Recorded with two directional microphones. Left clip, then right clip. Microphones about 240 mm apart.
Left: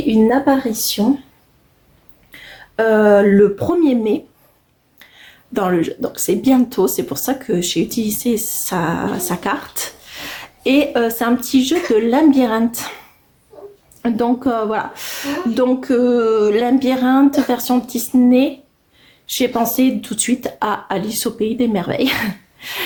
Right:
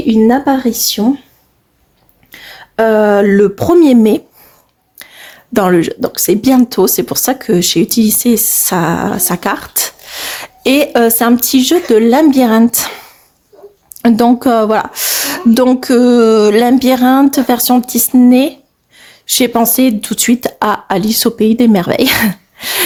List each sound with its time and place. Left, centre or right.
0.1 s speech: right
2.4 s speech: right